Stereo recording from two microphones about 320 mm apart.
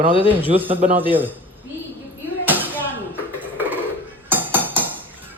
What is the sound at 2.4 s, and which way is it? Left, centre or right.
Music, centre.